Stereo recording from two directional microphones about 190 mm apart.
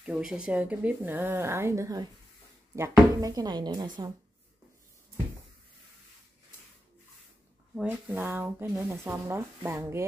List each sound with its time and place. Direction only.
0.0 s speech: 5° right (ahead or behind); by 4.1 s 20° right (ahead or behind)
7.7 s speech: 10° right (ahead or behind)